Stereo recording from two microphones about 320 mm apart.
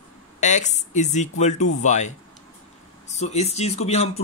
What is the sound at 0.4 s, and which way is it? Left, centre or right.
Speech, left.